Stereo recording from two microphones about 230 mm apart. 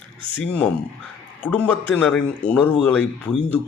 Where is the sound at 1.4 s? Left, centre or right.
Centre.